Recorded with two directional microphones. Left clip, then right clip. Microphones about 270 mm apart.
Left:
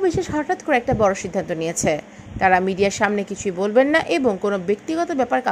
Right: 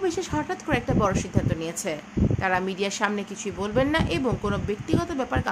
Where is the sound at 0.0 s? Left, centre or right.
Centre.